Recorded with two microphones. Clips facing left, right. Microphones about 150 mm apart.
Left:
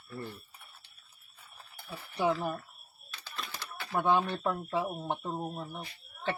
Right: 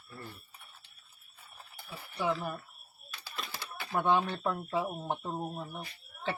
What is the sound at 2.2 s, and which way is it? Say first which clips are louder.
Speech: left 3 dB; 5° left (ahead or behind).